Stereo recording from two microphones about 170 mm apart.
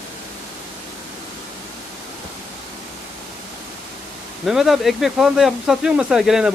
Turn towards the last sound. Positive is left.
turn(degrees=-5)  # may be behind; listen again after turning